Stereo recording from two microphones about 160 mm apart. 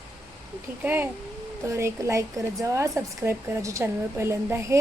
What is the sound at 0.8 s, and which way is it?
A woman's voice, 10° right (ahead or behind).